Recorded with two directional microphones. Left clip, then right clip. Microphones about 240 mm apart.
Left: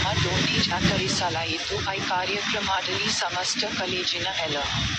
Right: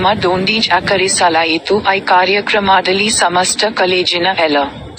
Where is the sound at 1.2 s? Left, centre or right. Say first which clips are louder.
Right 15 dB; right.